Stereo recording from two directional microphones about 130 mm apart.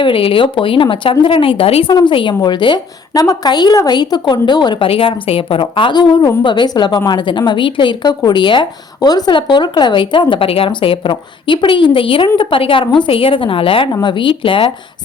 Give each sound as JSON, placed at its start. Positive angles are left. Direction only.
{"t": 0.0, "sound": "a woman's voice", "side_deg": 45}
{"t": 1.9, "sound": "a woman's voice", "side_deg": 35}